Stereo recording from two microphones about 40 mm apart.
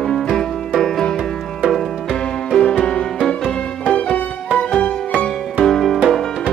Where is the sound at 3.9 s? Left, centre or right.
Left.